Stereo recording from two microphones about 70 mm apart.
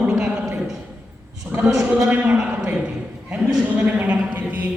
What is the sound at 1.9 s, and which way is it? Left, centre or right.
Speech, centre.